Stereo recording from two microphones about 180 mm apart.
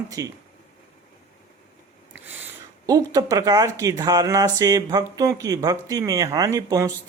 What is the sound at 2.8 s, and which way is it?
Speech, 20° right (ahead or behind).